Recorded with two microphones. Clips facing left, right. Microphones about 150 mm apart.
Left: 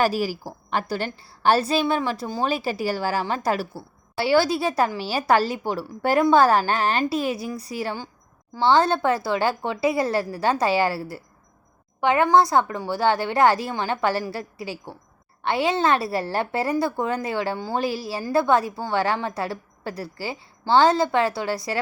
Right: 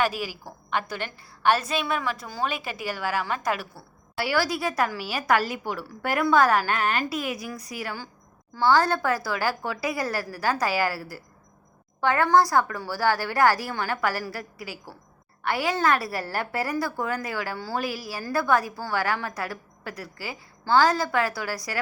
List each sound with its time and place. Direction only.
0.0 s a woman's voice: 35° left (ahead or behind)